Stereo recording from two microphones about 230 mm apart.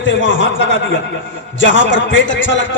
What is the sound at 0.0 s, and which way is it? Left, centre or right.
Speech, left.